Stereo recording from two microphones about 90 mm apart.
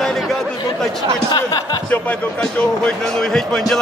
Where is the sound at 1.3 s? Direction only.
45° left (ahead or behind).